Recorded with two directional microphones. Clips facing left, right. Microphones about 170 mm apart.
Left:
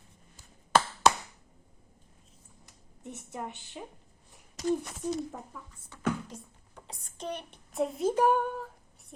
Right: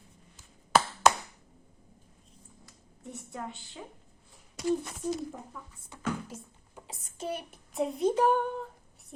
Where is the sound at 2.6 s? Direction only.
20° left (ahead or behind).